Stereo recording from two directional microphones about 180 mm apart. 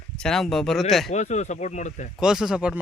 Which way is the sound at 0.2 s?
5° left (ahead or behind).